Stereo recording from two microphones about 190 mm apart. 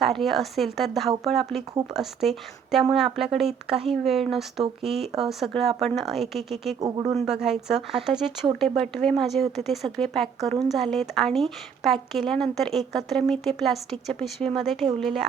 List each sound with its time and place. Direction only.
0.0 s speech: centre (ahead or behind)
6.7 s speech: 20° right (ahead or behind)
7.4 s speech: centre (ahead or behind)